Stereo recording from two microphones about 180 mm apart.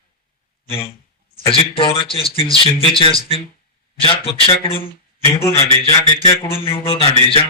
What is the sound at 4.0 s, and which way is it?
Mantra, 30° left (ahead or behind).